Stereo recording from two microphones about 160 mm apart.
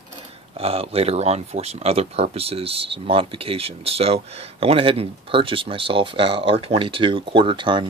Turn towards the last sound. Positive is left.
turn(degrees=-30)  # may be behind; listen again after turning